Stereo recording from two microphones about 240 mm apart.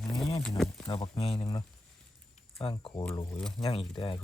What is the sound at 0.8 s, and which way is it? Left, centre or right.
Speech, centre.